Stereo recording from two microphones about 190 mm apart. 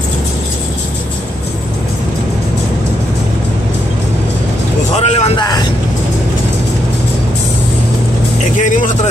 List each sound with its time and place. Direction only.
4.9 s vehicle: 35° left (ahead or behind)
8.5 s vehicle: 40° left (ahead or behind)